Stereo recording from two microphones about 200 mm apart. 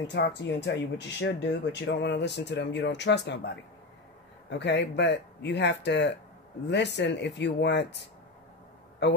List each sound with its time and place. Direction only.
0.0 s speech: 60° left (ahead or behind)